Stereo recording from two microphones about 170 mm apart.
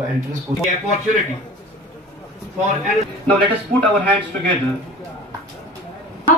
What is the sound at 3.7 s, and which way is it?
Speech, 45° right (ahead or behind).